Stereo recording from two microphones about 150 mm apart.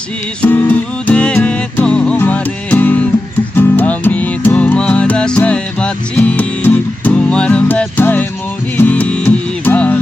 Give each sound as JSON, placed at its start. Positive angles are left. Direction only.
{"t": 0.4, "sound": "music", "side_deg": 10}